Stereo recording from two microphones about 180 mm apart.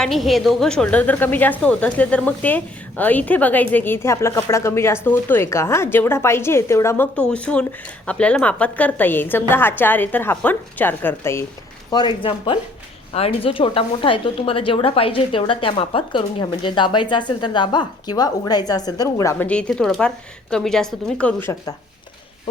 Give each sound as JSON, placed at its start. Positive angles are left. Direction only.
{"t": 0.0, "sound": "a woman's voice", "side_deg": 0}
{"t": 11.9, "sound": "a woman's voice", "side_deg": 25}